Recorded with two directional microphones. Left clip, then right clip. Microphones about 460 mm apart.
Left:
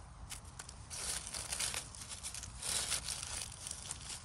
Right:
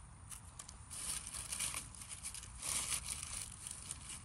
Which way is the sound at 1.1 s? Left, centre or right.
Centre.